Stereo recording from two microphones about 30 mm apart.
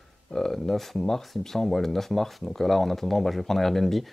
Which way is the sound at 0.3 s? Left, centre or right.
Centre.